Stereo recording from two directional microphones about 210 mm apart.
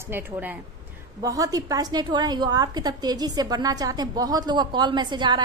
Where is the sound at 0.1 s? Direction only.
10° right (ahead or behind).